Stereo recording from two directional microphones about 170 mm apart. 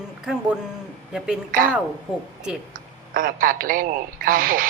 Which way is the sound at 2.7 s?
55° right (ahead or behind).